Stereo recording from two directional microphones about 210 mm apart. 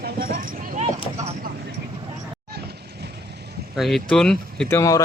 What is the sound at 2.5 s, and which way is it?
Vehicle, 50° right (ahead or behind).